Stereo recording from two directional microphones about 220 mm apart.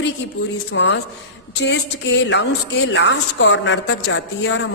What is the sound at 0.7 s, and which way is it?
A woman's voice, 55° left (ahead or behind).